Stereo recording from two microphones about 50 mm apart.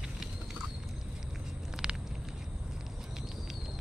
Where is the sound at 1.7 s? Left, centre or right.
Centre.